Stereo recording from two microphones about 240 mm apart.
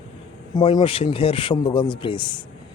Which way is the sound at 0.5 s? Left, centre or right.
Centre.